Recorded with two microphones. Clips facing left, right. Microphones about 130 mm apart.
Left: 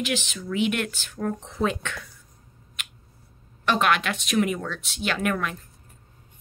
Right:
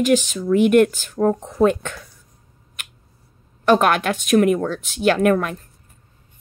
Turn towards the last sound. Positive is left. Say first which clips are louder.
# right 10 dB
turn(degrees=-45)  # may be behind; listen again after turning